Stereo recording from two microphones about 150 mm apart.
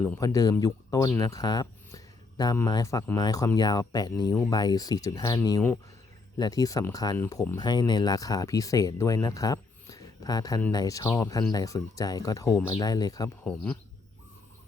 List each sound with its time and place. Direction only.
0.2 s speech: 25° left (ahead or behind)